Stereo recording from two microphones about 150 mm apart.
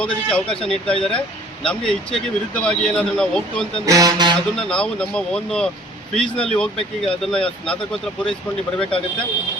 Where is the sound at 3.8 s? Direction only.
25° right (ahead or behind).